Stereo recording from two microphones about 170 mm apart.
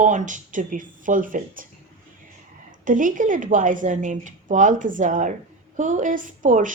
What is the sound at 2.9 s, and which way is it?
A woman's voice, 50° right (ahead or behind).